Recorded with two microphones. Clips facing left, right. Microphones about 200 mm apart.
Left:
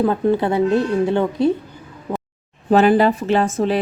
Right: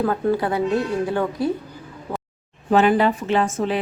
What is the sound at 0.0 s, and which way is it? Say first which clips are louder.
A woman's voice: left 3 dB; 20° left (ahead or behind).